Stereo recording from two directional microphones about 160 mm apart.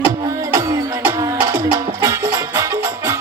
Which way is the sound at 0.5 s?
20° right (ahead or behind).